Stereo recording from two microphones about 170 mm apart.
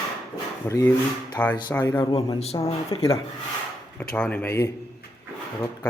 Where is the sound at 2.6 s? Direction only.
20° left (ahead or behind).